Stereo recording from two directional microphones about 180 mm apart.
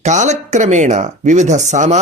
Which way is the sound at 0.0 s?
40° right (ahead or behind).